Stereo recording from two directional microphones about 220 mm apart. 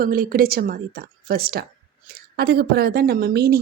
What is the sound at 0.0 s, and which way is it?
Speech, 40° right (ahead or behind).